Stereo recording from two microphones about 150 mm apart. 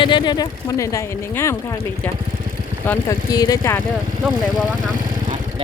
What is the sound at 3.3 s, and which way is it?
Speech, 25° left (ahead or behind).